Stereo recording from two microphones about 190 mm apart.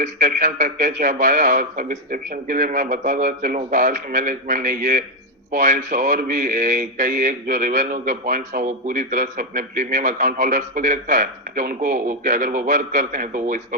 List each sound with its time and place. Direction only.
0.0 s speech: 40° right (ahead or behind)